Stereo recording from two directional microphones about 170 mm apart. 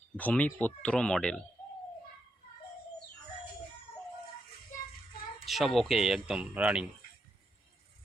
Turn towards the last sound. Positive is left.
turn(degrees=-5)  # may be behind; listen again after turning